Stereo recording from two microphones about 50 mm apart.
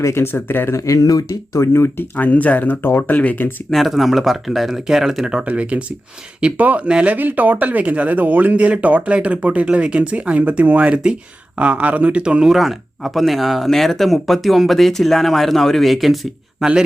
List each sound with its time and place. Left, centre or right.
0.0 s speech: left
0.8 s speech: left
1.7 s speech: left
2.1 s speech: left
3.7 s speech: centre; by 12.5 s right
12.5 s speech: centre